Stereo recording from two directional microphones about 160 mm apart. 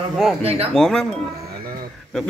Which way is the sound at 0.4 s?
40° right (ahead or behind).